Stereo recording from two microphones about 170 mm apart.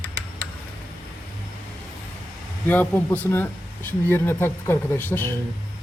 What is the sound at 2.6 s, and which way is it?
Speech, 10° left (ahead or behind).